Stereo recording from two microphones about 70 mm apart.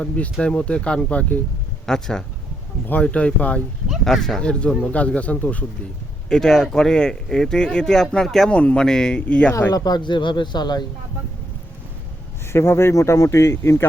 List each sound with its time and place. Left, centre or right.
0.3 s speech: centre
1.9 s speech: centre
2.8 s speech: left
4.0 s speech: centre; by 5.6 s left
6.2 s speech: centre
9.7 s speech: left
12.5 s speech: left